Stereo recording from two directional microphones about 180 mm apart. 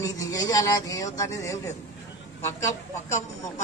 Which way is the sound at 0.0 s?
20° left (ahead or behind).